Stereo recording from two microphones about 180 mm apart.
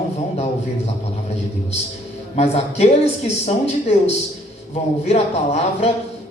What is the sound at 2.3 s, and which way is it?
Speech, 35° left (ahead or behind).